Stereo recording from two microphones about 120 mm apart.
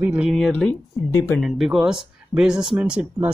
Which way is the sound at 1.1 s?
20° left (ahead or behind).